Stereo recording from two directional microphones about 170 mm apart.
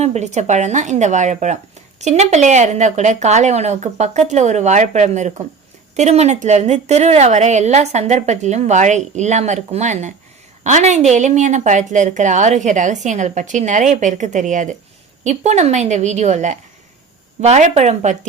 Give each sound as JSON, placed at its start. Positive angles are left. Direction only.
{"t": 0.0, "sound": "a woman's voice", "side_deg": -40}